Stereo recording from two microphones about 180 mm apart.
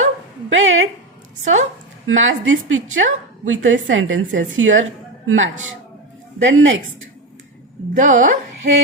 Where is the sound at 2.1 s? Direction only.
90° right.